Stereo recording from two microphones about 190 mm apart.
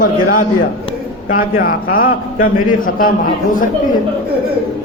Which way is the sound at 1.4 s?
50° left (ahead or behind).